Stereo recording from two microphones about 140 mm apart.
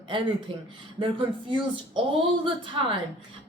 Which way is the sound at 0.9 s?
35° right (ahead or behind).